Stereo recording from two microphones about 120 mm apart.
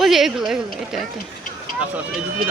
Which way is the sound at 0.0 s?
5° right (ahead or behind).